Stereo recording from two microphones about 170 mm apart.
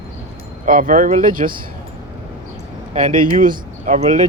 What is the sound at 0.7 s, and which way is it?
Speech, 50° right (ahead or behind).